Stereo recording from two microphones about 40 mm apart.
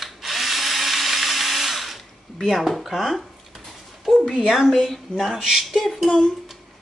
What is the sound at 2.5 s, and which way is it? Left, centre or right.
Speech, centre.